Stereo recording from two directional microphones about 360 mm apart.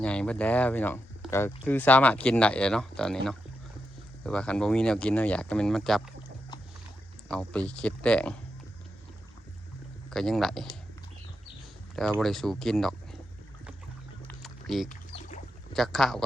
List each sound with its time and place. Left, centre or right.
0.0 s speech: centre
7.3 s speech: centre
10.1 s speech: centre
11.9 s speech: centre
14.3 s a sound: centre
14.8 s a sound: centre
15.7 s speech: centre